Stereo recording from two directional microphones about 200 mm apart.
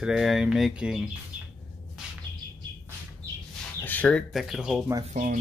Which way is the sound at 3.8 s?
10° left (ahead or behind).